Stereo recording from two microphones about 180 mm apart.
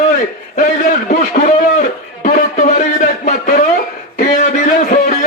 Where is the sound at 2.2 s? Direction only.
45° left (ahead or behind).